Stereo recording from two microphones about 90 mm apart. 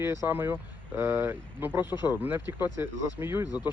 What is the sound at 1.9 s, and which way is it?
Speech, 50° left (ahead or behind).